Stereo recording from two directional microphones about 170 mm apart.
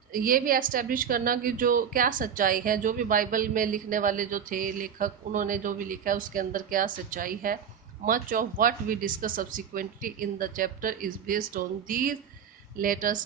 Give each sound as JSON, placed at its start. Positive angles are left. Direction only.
{"t": 0.1, "sound": "a woman's voice", "side_deg": -55}